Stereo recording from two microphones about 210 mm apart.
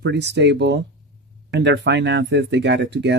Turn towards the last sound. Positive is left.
turn(degrees=-55)  # may be behind; listen again after turning